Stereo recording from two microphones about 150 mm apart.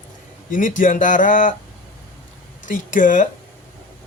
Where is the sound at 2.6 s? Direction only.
60° left (ahead or behind).